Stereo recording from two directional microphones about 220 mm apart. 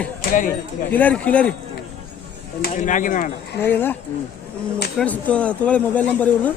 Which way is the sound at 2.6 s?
35° left (ahead or behind).